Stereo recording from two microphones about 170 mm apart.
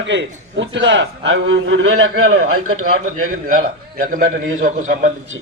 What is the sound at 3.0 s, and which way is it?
A man's voice, 55° right (ahead or behind).